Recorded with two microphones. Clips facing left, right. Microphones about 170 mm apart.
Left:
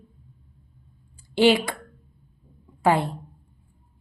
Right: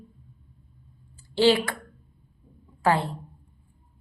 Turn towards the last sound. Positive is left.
turn(degrees=15)  # may be behind; listen again after turning